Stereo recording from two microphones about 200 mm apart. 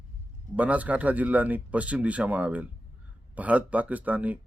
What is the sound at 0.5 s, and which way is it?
Speech, 5° right (ahead or behind).